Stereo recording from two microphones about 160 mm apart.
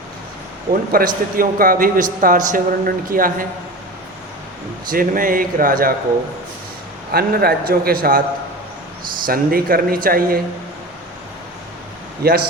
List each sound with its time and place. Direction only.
0.9 s a man's voice: 60° right (ahead or behind)
4.9 s a man's voice: 60° right (ahead or behind)
7.1 s a man's voice: 75° right (ahead or behind)
9.2 s a man's voice: 65° right (ahead or behind)
12.2 s a man's voice: 75° right (ahead or behind)